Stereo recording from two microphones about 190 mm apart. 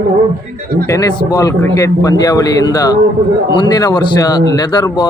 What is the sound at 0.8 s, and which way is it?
A man's voice, 15° left (ahead or behind).